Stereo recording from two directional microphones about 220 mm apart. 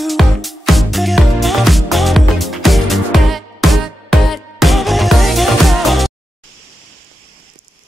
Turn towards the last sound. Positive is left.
turn(degrees=0)  # may be behind; listen again after turning